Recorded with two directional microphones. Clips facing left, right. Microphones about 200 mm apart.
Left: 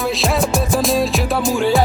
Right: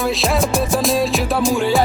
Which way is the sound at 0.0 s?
Centre (ahead or behind).